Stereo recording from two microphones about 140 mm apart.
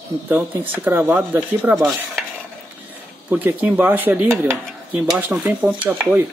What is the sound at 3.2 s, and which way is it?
Speech, 10° right (ahead or behind).